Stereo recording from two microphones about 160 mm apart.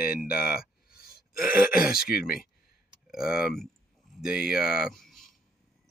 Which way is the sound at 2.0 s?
70° left (ahead or behind).